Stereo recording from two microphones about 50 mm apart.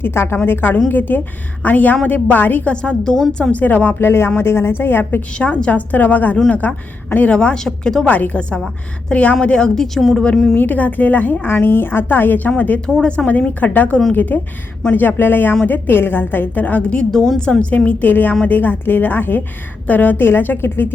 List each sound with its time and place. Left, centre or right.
0.0 s a woman's voice: left
2.6 s a woman's voice: left
3.5 s a woman's voice: left
3.9 s a woman's voice: left
5.3 s a woman's voice: left
7.3 s a woman's voice: centre
8.0 s a woman's voice: left; by 10.2 s centre
10.5 s a woman's voice: left
11.4 s a woman's voice: left
17.1 s a woman's voice: centre
17.7 s a woman's voice: left
19.9 s a woman's voice: left
20.1 s a woman's voice: left
20.6 s speech: left